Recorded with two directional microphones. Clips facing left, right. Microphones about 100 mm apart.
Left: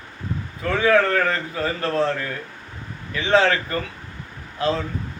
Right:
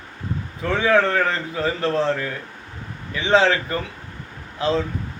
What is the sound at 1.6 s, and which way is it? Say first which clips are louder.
Speech: right 4 dB; 15° right (ahead or behind).